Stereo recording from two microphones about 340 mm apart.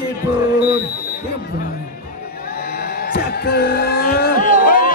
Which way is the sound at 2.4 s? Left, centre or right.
Left.